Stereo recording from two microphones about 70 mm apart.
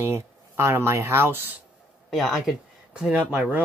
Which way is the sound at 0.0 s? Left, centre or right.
Right.